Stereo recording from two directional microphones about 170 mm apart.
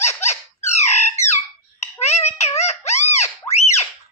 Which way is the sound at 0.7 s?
40° left (ahead or behind).